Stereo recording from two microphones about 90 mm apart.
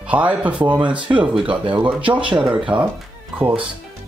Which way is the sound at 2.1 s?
10° right (ahead or behind).